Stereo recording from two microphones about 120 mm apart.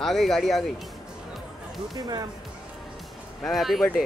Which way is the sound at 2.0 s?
35° right (ahead or behind).